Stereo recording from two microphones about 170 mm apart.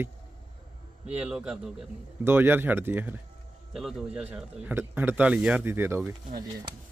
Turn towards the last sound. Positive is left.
turn(degrees=-15)  # may be behind; listen again after turning